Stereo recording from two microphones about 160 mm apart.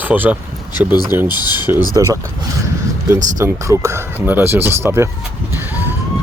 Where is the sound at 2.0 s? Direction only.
20° right (ahead or behind).